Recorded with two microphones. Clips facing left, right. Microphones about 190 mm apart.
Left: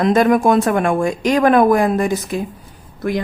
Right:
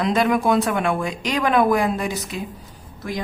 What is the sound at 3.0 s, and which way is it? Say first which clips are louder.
Speech: left 7 dB; 60° left (ahead or behind).